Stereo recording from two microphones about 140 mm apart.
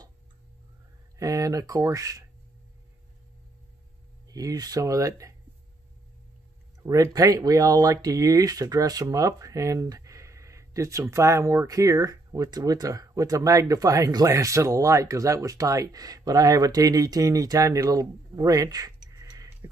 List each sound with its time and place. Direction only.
1.1 s speech: 25° right (ahead or behind)
4.3 s speech: 25° right (ahead or behind)
6.8 s speech: 20° right (ahead or behind)